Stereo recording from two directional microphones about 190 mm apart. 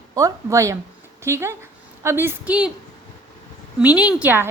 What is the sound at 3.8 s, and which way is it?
Speech, 5° right (ahead or behind).